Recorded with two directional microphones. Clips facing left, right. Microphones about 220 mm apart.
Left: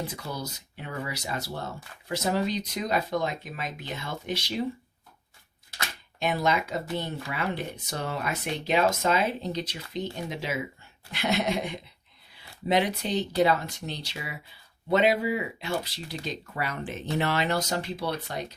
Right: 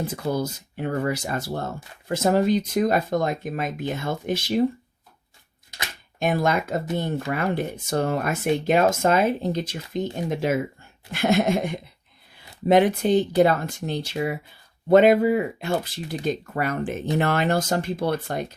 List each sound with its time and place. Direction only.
0.1 s speech: 50° right (ahead or behind)
6.1 s speech: 50° right (ahead or behind)